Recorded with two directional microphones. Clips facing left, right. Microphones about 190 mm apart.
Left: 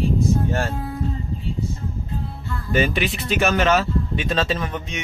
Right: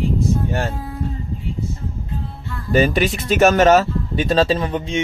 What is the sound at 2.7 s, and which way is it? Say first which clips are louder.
Speech: right 5 dB; 40° right (ahead or behind).